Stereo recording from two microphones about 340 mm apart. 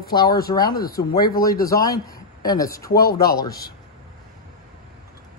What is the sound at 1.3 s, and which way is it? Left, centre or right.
Speech, centre.